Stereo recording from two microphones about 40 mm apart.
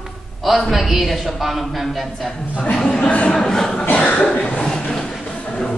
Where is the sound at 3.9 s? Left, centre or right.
Left.